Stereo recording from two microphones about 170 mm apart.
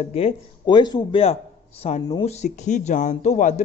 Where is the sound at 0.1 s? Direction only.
30° left (ahead or behind).